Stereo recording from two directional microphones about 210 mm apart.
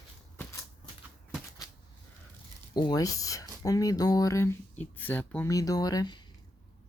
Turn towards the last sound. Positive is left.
turn(degrees=20)  # may be behind; listen again after turning